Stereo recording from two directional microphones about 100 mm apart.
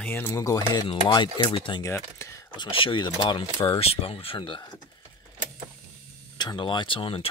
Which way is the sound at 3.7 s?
70° left (ahead or behind).